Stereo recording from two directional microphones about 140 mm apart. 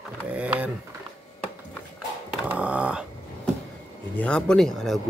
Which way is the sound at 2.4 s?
10° right (ahead or behind).